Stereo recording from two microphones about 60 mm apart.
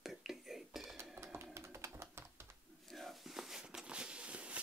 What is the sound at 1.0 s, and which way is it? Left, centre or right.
Typing, right.